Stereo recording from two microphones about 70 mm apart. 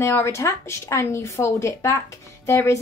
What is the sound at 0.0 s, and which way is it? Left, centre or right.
A woman's voice, left.